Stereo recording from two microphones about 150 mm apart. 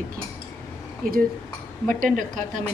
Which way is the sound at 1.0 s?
70° right (ahead or behind).